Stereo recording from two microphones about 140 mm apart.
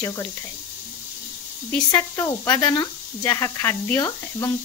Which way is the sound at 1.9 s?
25° left (ahead or behind).